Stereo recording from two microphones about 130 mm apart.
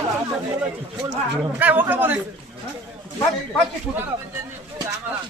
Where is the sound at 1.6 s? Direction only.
15° right (ahead or behind).